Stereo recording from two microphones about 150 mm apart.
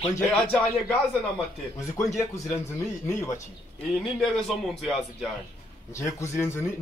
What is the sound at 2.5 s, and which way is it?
Speech, 20° left (ahead or behind).